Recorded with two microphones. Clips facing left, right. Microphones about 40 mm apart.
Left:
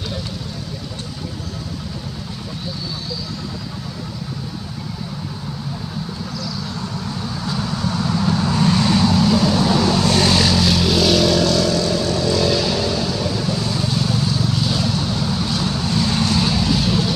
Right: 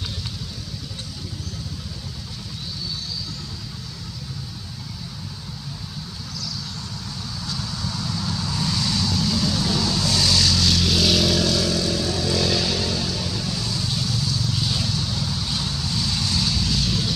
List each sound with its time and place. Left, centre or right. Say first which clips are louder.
7.4 s vehicle: left 7 dB; left
10.6 s vehicle: left 4 dB; centre
13.7 s vehicle: left 6 dB; left